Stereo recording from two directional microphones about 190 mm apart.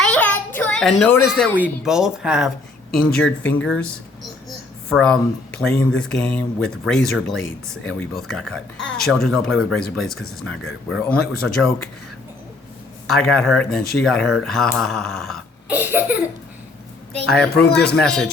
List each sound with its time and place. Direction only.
0.0 s a sound: 5° left (ahead or behind)
1.5 s speech: 5° right (ahead or behind)
4.9 s speech: 5° left (ahead or behind)
13.1 s speech: centre (ahead or behind)
15.9 s baby laughter: 10° right (ahead or behind)
17.5 s speech: 55° left (ahead or behind)
17.7 s speech: 5° left (ahead or behind)